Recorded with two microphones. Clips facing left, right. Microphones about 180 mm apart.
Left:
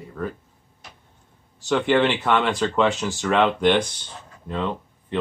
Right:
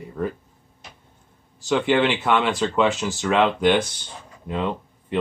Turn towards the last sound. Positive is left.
turn(degrees=-15)  # may be behind; listen again after turning